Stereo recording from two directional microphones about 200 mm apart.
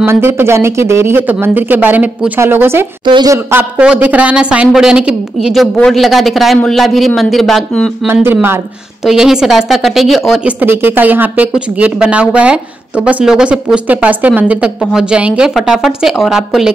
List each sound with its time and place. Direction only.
0.0 s speech: 10° right (ahead or behind)
3.1 s speech: 20° right (ahead or behind)
3.5 s speech: 5° right (ahead or behind)
8.1 s speech: 10° right (ahead or behind)